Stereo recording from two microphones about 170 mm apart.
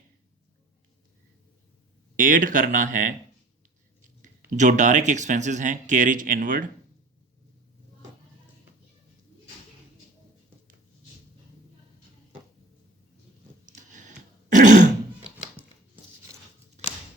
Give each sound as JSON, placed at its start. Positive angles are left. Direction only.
{"t": 2.1, "sound": "speech", "side_deg": -50}
{"t": 4.5, "sound": "speech", "side_deg": -45}
{"t": 13.7, "sound": "biting", "side_deg": -45}
{"t": 14.5, "sound": "throat clearing", "side_deg": -45}
{"t": 16.8, "sound": "a sound", "side_deg": -40}